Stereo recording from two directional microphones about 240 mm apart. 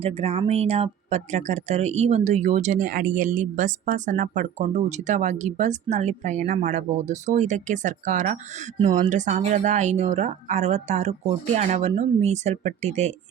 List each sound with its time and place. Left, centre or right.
0.0 s speech: right